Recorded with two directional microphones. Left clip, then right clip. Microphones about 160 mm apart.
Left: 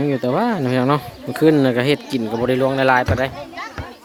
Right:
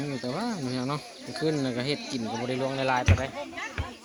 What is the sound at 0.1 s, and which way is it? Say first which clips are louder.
Speech: left 13 dB; 90° left.